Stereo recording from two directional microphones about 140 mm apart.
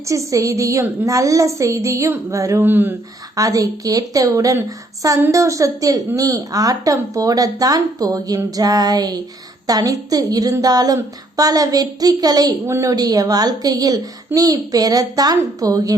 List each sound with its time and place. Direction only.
0.1 s a woman's voice: 25° right (ahead or behind)
3.3 s a woman's voice: 25° right (ahead or behind)